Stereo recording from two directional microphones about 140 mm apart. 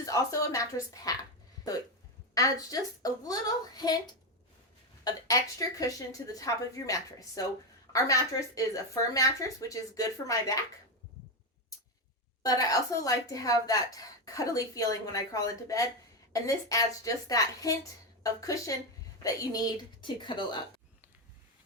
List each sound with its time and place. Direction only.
0.0 s a woman's voice: 25° left (ahead or behind)
2.3 s a woman's voice: 25° left (ahead or behind)
12.4 s a woman's voice: 25° left (ahead or behind)